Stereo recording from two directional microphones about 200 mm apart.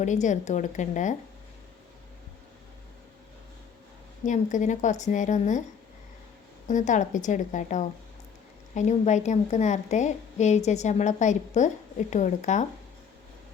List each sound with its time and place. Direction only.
0.0 s a woman's voice: 35° left (ahead or behind)
4.3 s a woman's voice: 40° left (ahead or behind)
6.7 s a woman's voice: 40° left (ahead or behind)